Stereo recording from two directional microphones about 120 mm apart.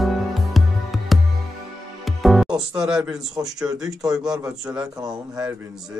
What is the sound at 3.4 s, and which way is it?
A man's voice, 25° right (ahead or behind).